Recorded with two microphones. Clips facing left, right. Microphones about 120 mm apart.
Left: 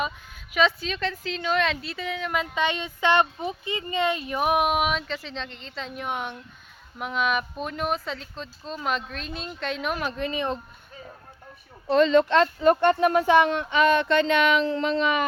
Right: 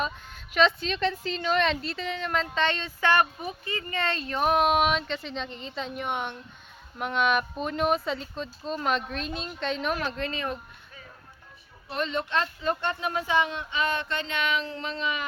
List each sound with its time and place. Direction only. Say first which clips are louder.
0.0 s speech: left 1 dB; 5° left (ahead or behind)
11.9 s speech: left 12 dB; 90° left
12.3 s speech: left 9 dB; 75° left (ahead or behind)